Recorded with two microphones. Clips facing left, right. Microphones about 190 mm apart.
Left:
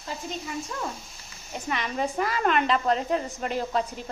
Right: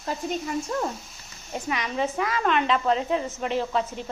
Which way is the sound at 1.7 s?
Centre (ahead or behind).